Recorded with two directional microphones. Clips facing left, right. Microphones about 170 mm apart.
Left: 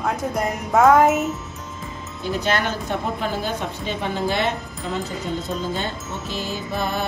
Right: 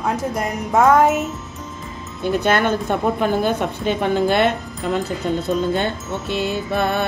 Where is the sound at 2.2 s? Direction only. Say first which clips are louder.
Right 5 dB; 55° right (ahead or behind).